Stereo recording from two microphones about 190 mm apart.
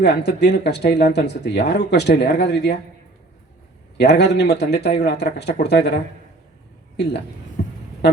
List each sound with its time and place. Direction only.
0.0 s speech: 65° left (ahead or behind)
3.9 s speech: 60° left (ahead or behind)